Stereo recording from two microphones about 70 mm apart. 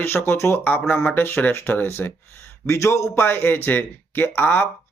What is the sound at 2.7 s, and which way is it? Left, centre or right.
Speech, left.